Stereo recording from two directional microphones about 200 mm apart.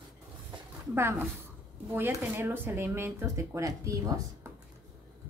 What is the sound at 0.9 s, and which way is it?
A woman's voice, 10° right (ahead or behind).